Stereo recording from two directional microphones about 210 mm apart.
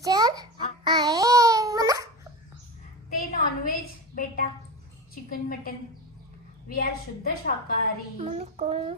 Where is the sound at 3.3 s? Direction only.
45° left (ahead or behind).